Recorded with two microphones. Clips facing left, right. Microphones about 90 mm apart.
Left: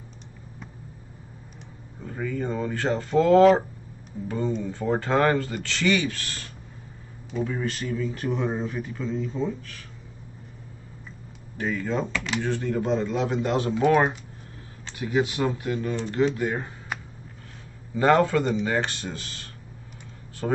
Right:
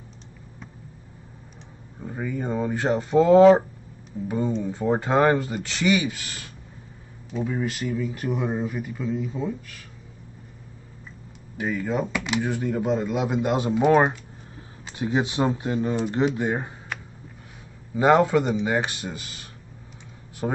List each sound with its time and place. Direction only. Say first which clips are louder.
2.0 s speech: even; 15° right (ahead or behind)
4.6 s speech: right 2 dB; 15° right (ahead or behind)
11.5 s speech: right 1 dB; 10° right (ahead or behind)
17.9 s speech: right 2 dB; 15° right (ahead or behind)